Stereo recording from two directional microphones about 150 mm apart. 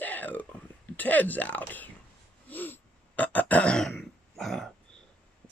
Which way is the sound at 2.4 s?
10° left (ahead or behind).